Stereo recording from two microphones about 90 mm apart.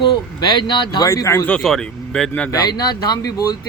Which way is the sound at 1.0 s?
35° left (ahead or behind).